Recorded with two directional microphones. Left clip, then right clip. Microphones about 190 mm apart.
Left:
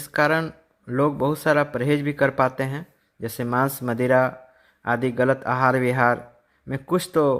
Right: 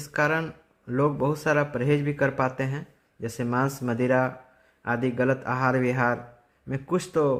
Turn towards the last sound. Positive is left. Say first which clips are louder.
# left 4 dB
turn(degrees=25)  # may be behind; listen again after turning